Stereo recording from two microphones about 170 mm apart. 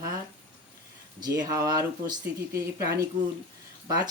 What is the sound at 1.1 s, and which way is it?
Speech, 25° right (ahead or behind).